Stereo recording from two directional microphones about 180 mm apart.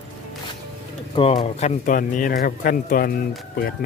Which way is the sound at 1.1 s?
30° left (ahead or behind).